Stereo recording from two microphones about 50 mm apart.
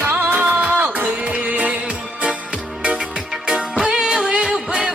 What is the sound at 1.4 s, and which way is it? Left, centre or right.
Music, right.